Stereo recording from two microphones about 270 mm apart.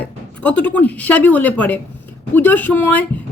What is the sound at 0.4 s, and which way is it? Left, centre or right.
A woman's voice, centre.